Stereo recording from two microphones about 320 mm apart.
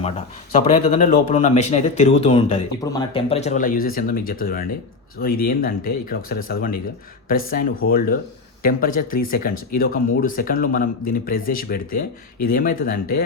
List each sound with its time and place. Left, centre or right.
0.6 s speech: centre